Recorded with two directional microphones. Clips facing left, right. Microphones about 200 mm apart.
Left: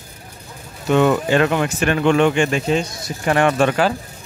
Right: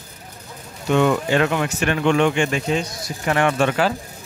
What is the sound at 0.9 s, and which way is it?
Speech, 40° left (ahead or behind).